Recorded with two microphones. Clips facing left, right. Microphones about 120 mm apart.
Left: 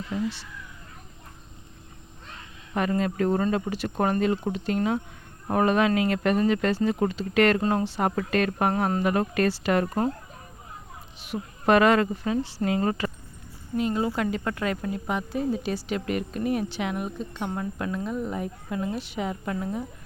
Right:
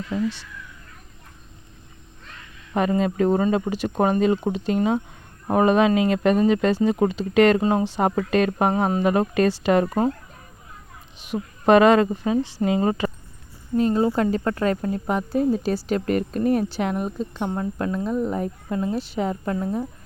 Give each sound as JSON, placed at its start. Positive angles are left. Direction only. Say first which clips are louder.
{"t": 2.7, "sound": "speech", "louder": "right 4 dB", "side_deg": -20}
{"t": 11.3, "sound": "speech", "louder": "right 5 dB", "side_deg": -25}
{"t": 13.7, "sound": "speech", "louder": "right 6 dB", "side_deg": -35}